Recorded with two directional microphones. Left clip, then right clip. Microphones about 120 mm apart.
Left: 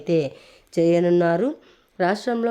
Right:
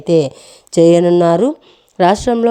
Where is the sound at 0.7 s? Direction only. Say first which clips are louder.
Right 9 dB; 60° right (ahead or behind).